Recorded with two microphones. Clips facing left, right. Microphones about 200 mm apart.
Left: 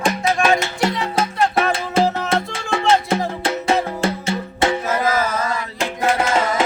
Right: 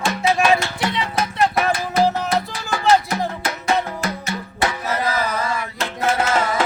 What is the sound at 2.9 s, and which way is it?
Music, 25° left (ahead or behind).